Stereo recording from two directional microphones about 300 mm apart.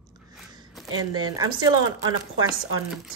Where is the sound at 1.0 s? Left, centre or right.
Centre.